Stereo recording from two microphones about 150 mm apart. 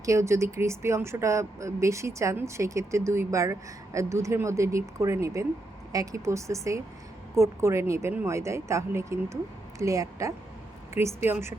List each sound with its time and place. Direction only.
0.0 s speech: 20° right (ahead or behind)